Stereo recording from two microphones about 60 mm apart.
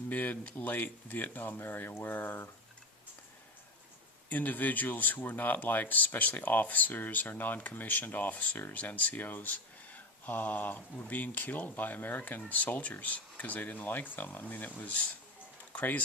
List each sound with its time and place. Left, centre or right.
0.1 s speech: left
4.3 s speech: left